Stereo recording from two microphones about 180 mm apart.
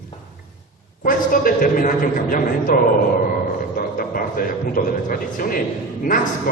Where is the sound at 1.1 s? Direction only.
50° left (ahead or behind).